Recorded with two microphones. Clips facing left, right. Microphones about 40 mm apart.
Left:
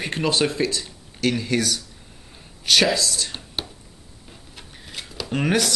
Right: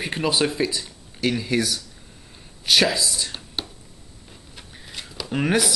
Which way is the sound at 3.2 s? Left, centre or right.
Centre.